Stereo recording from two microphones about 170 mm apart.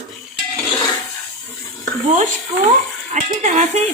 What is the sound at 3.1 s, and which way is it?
Speech, 45° right (ahead or behind).